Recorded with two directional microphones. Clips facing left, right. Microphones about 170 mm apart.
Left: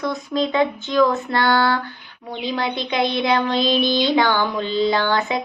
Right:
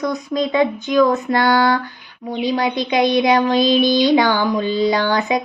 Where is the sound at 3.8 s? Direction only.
45° right (ahead or behind).